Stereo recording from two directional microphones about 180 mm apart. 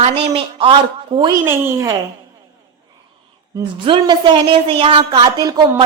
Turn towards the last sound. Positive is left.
turn(degrees=-20)  # may be behind; listen again after turning